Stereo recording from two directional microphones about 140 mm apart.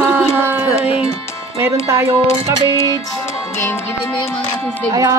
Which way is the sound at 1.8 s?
20° right (ahead or behind).